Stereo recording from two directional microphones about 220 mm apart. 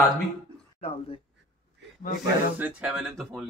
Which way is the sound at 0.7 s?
25° left (ahead or behind).